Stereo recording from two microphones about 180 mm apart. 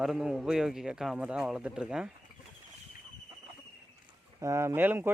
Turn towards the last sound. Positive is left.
turn(degrees=-10)  # may be behind; listen again after turning